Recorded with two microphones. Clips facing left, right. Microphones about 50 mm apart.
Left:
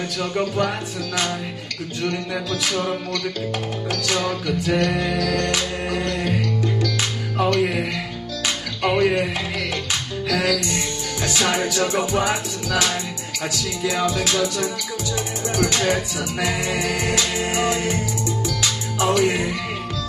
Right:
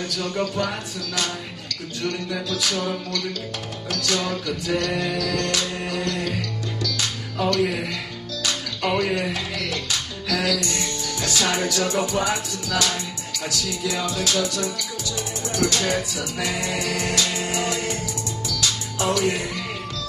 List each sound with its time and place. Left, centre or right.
0.2 s music: left
7.3 s speech: left
8.5 s music: left
10.3 s music: left